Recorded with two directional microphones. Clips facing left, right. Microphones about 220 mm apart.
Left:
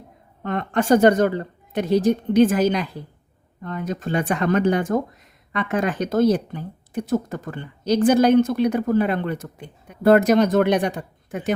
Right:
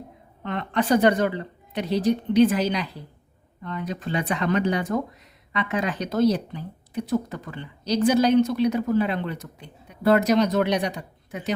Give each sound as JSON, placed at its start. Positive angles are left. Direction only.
{"t": 0.4, "sound": "speech", "side_deg": 45}